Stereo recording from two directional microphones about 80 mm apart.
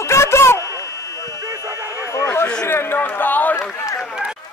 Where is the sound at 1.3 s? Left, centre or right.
Right.